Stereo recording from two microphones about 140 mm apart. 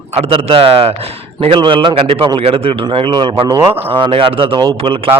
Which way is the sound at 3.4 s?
25° right (ahead or behind).